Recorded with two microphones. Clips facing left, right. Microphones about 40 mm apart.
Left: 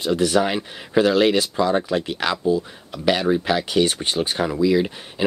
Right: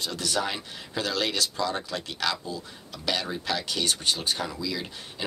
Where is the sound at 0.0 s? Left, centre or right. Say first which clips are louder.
Left 10 dB; left.